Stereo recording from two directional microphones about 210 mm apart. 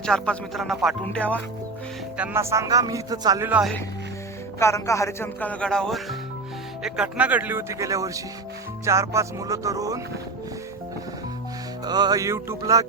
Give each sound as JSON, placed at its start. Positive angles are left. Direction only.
{"t": 0.0, "sound": "speech", "side_deg": 5}
{"t": 2.1, "sound": "speech", "side_deg": -10}
{"t": 4.6, "sound": "speech", "side_deg": 15}
{"t": 11.9, "sound": "speech", "side_deg": -20}